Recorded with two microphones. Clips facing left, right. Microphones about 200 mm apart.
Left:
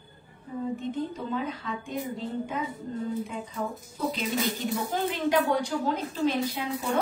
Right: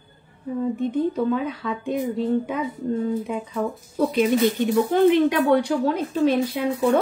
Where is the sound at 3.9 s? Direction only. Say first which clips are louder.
Right 10 dB; 60° right (ahead or behind).